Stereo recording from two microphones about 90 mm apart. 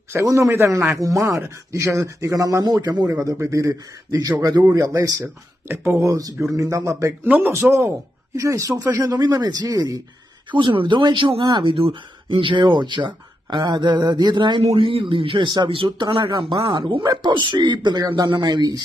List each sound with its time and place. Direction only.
0.1 s a man's voice: 35° right (ahead or behind)
3.1 s a man's voice: 35° right (ahead or behind)
5.2 s a man's voice: 25° right (ahead or behind)
7.2 s speech: 20° right (ahead or behind)
8.4 s a man's voice: 35° right (ahead or behind)
10.6 s speech: 65° right (ahead or behind)
18.0 s speech: 45° right (ahead or behind)